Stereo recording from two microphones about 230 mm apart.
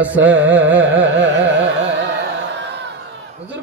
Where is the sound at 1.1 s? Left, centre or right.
Right.